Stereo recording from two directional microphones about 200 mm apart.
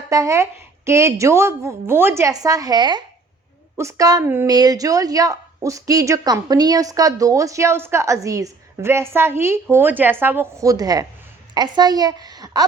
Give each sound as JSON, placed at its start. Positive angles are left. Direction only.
{"t": 0.1, "sound": "a woman's voice", "side_deg": -15}